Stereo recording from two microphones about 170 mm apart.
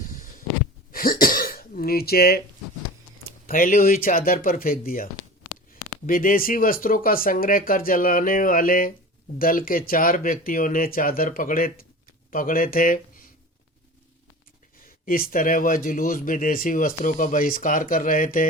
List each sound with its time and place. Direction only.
0.9 s throat clearing: 55° left (ahead or behind)
3.2 s speech: 55° left (ahead or behind)
6.1 s speech: 55° left (ahead or behind)
15.0 s speech: 55° left (ahead or behind)